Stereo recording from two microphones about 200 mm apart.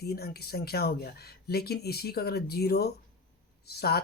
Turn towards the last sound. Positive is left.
turn(degrees=50)  # may be behind; listen again after turning